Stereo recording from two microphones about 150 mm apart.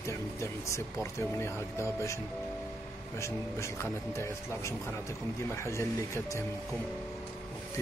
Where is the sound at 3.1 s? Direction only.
20° left (ahead or behind).